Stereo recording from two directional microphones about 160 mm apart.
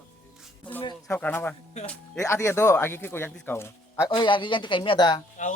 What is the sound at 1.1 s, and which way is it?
Speech, 10° left (ahead or behind).